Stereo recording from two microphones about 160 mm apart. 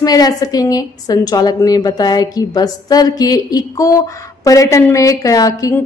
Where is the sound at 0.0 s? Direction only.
25° left (ahead or behind).